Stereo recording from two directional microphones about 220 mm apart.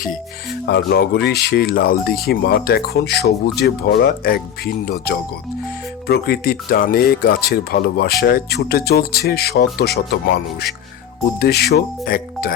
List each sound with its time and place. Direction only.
0.6 s speech: 50° left (ahead or behind)